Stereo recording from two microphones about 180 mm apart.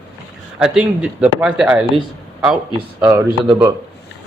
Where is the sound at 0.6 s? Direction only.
5° right (ahead or behind).